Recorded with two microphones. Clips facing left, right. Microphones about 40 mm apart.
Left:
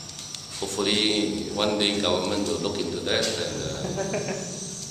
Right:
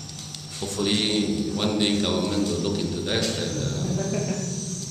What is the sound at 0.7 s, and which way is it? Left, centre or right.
A man's voice, centre.